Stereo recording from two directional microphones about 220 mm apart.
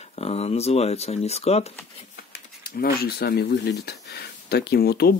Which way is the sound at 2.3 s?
45° left (ahead or behind).